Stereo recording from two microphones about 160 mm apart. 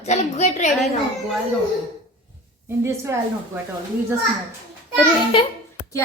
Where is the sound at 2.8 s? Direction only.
15° right (ahead or behind).